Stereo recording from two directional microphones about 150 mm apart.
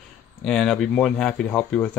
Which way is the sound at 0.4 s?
5° left (ahead or behind).